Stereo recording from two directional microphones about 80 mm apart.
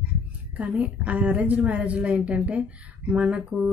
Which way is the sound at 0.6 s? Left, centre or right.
Centre.